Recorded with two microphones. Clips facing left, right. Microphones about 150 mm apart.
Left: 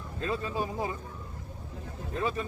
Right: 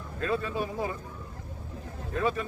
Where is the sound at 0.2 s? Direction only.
25° left (ahead or behind).